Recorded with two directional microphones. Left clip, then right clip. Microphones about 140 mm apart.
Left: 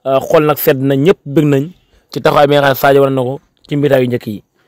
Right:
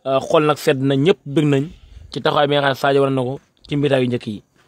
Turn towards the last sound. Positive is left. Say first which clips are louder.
# left 6 dB
turn(degrees=45)  # may be behind; listen again after turning